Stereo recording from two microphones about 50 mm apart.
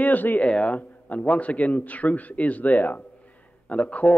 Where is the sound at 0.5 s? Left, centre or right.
Left.